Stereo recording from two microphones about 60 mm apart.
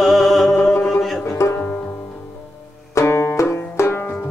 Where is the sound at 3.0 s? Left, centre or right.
Left.